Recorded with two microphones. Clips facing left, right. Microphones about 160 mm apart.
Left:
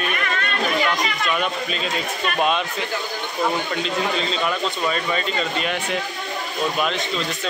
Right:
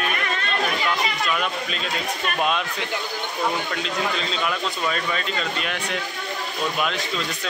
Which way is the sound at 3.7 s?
Centre (ahead or behind).